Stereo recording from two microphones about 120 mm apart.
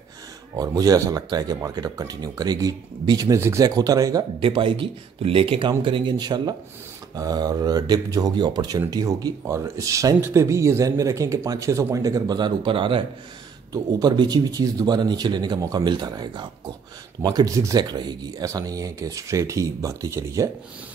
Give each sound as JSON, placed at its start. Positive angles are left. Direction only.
{"t": 0.6, "sound": "speech", "side_deg": -30}
{"t": 4.4, "sound": "speech", "side_deg": -45}